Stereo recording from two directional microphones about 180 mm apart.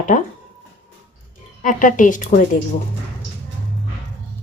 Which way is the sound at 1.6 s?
45° left (ahead or behind).